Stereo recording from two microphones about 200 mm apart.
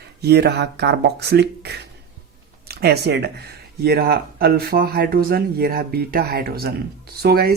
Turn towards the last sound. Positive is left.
turn(degrees=-50)  # may be behind; listen again after turning